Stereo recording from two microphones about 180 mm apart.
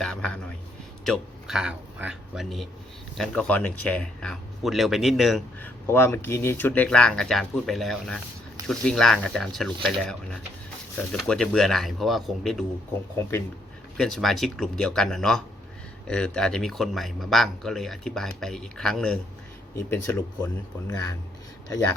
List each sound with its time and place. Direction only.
0.0 s a sound: 5° left (ahead or behind)
1.0 s a man's voice: centre (ahead or behind)
13.9 s speech: 5° left (ahead or behind)
19.7 s speech: 15° left (ahead or behind)